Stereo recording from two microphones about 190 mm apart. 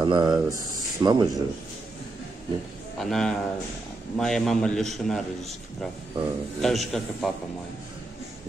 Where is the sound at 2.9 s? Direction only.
Centre (ahead or behind).